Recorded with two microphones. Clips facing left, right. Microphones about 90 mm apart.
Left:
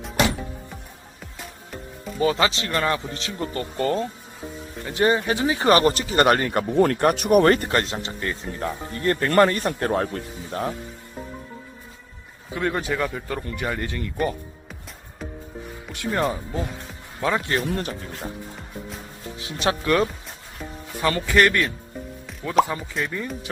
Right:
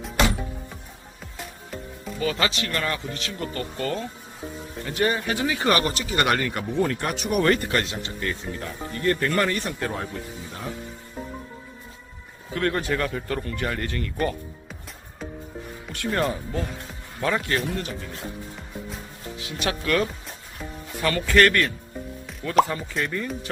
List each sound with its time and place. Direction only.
2.1 s speech: 30° left (ahead or behind); by 10.7 s 60° left (ahead or behind)
12.5 s speech: 10° left (ahead or behind)
13.4 s speech: 15° left (ahead or behind)
15.9 s speech: 10° left (ahead or behind)
19.4 s speech: 25° left (ahead or behind)
21.2 s speech: 15° left (ahead or behind)
22.3 s speech: 5° left (ahead or behind)